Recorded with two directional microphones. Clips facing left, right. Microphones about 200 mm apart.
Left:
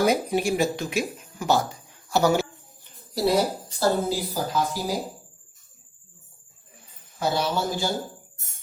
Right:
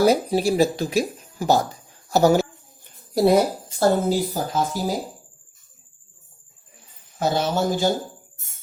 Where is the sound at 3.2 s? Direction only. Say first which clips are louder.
Right 5 dB; 50° right (ahead or behind).